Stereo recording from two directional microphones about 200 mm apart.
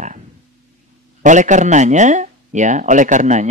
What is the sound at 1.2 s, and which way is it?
Speech, 40° right (ahead or behind).